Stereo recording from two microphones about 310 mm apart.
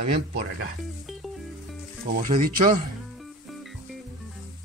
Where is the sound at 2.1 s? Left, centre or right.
Right.